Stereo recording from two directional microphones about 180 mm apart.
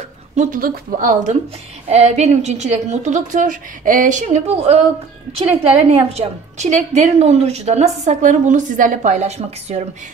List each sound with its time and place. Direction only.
0.4 s a woman's voice: 50° right (ahead or behind)